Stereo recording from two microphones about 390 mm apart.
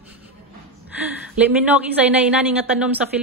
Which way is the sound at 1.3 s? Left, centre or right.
Centre.